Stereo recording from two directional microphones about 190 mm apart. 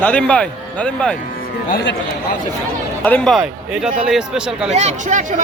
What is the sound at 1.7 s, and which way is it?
Speech, 65° left (ahead or behind).